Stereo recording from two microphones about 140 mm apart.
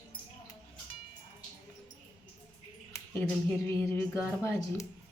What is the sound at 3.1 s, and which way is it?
A woman's voice, 15° left (ahead or behind).